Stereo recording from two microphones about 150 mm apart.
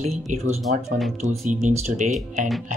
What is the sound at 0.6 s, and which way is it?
Speech, centre (ahead or behind).